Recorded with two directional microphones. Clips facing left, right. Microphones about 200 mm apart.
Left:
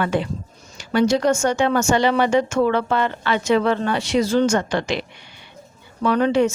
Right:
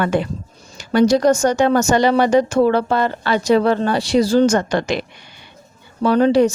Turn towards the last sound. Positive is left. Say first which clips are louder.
# right 4 dB
turn(degrees=-35)  # may be behind; listen again after turning